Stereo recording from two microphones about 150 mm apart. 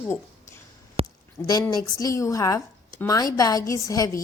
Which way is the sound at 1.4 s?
20° left (ahead or behind).